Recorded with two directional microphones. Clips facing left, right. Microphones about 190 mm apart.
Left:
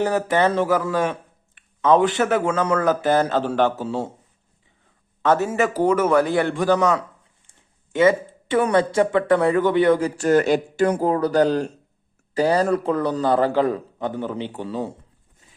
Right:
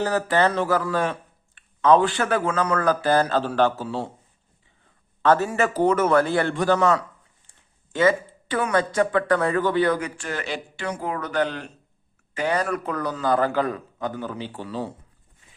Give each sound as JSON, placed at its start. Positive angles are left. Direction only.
{"t": 0.0, "sound": "a man's voice", "side_deg": 20}
{"t": 5.2, "sound": "a man's voice", "side_deg": 20}
{"t": 10.2, "sound": "speech", "side_deg": 45}
{"t": 11.1, "sound": "a man's voice", "side_deg": 35}